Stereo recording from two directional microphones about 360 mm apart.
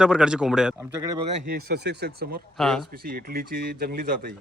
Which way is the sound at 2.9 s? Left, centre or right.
Right.